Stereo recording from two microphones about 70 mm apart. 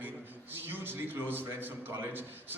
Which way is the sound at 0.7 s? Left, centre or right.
Right.